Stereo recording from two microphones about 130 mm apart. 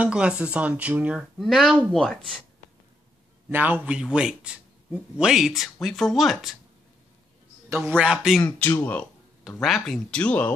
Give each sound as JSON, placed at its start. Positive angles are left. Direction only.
{"t": 0.0, "sound": "a man's voice", "side_deg": -10}
{"t": 3.4, "sound": "a man's voice", "side_deg": -15}
{"t": 7.7, "sound": "a man's voice", "side_deg": -20}
{"t": 8.0, "sound": "speech", "side_deg": -5}
{"t": 8.4, "sound": "speech", "side_deg": 10}
{"t": 9.6, "sound": "a man's voice", "side_deg": 0}